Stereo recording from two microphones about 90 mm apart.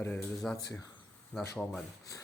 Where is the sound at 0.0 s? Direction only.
20° left (ahead or behind).